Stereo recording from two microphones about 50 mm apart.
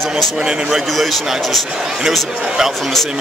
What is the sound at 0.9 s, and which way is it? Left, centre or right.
Speech, centre.